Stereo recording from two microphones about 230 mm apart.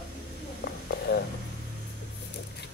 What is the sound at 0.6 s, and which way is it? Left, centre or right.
Sizzle, left.